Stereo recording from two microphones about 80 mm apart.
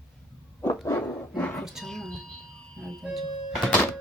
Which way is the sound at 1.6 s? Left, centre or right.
Centre.